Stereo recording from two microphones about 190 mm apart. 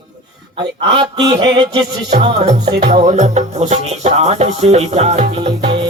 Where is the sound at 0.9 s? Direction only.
25° right (ahead or behind).